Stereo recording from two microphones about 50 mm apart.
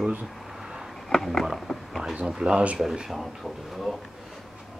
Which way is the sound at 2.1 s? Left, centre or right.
Centre.